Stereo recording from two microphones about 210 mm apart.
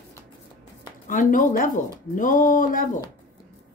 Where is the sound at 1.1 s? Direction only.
40° left (ahead or behind).